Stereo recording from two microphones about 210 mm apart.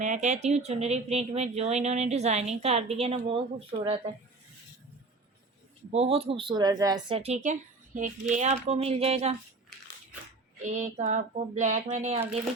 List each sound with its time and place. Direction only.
0.0 s speech: 35° right (ahead or behind)
5.9 s speech: 30° right (ahead or behind)
7.2 s speech: 30° right (ahead or behind)
10.6 s speech: 35° right (ahead or behind)